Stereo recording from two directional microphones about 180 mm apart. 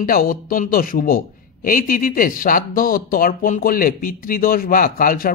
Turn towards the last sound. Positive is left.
turn(degrees=50)  # may be behind; listen again after turning